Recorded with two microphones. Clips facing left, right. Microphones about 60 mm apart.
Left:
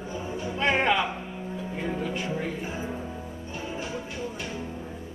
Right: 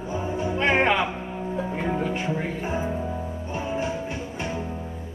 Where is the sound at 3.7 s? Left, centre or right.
Right.